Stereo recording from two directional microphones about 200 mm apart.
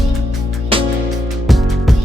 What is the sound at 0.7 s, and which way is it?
Music, 25° right (ahead or behind).